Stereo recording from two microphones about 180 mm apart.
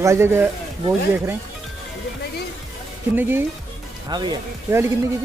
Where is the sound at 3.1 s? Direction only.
10° right (ahead or behind).